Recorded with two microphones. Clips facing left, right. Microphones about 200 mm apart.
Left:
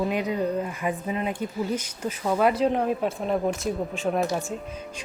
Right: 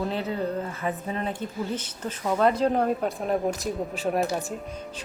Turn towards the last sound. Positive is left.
turn(degrees=-5)  # may be behind; listen again after turning